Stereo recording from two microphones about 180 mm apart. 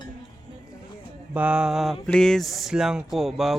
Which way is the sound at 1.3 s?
5° right (ahead or behind).